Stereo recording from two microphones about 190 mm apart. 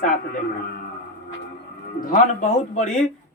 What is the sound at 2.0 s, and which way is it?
Speech, 40° left (ahead or behind).